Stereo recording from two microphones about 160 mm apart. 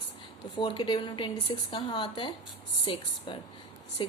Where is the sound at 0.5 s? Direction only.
30° left (ahead or behind).